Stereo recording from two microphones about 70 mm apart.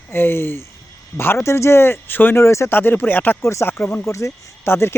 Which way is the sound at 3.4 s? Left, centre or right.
Left.